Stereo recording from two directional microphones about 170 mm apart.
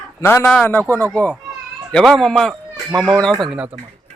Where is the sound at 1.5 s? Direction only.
Centre (ahead or behind).